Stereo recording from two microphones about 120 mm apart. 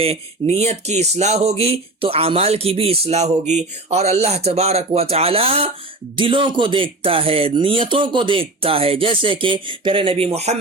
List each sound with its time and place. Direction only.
0.0 s speech: 55° right (ahead or behind)